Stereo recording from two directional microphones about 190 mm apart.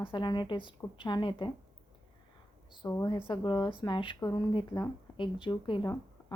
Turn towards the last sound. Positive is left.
turn(degrees=25)  # may be behind; listen again after turning